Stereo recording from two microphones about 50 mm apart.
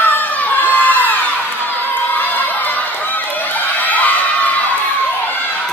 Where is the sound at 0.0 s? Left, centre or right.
Left.